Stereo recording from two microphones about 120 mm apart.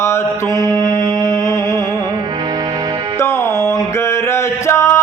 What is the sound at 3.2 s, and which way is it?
Music, 20° left (ahead or behind).